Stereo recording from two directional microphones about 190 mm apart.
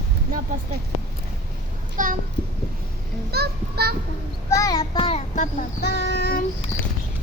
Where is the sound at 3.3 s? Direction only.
55° right (ahead or behind).